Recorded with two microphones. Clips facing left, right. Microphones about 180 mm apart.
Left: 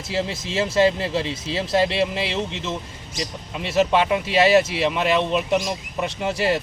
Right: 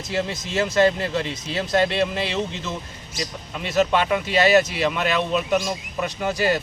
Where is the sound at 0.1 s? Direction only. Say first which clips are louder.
Even; 30° left (ahead or behind).